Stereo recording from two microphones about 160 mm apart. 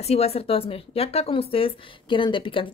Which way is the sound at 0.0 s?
40° left (ahead or behind).